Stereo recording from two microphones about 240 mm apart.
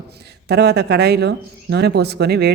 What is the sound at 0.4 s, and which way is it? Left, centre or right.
Speech, right.